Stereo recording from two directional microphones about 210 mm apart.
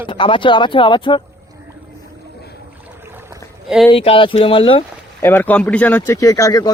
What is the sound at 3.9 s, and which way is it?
Speech, 25° left (ahead or behind).